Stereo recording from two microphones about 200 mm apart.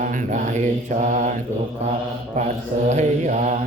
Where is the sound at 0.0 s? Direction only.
40° right (ahead or behind).